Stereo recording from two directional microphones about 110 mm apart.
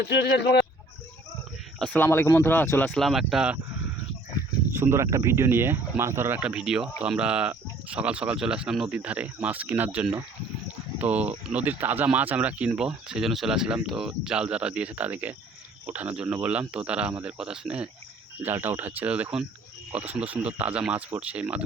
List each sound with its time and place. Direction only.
2.0 s speech: 20° left (ahead or behind)
3.0 s speech: centre (ahead or behind)
4.7 s speech: 20° right (ahead or behind)
6.4 s speech: 10° right (ahead or behind)
18.4 s speech: 20° right (ahead or behind)